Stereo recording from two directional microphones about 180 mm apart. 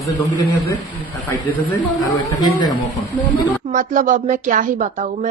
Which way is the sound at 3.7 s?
45° right (ahead or behind).